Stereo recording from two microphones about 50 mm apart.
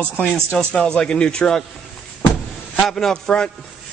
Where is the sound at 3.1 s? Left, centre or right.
Centre.